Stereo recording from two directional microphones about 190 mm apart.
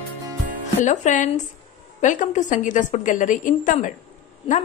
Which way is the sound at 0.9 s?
40° left (ahead or behind).